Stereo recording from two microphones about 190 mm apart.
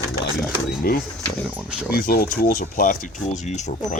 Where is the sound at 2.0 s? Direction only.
50° left (ahead or behind).